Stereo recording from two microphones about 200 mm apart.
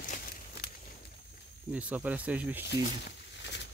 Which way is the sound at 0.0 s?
40° left (ahead or behind).